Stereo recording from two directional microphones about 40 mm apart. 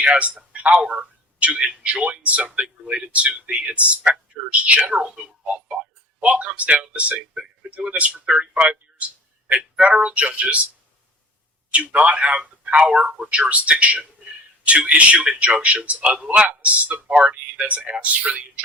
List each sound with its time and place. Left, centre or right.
0.0 s a man's voice: right
6.2 s speech: right
11.7 s speech: right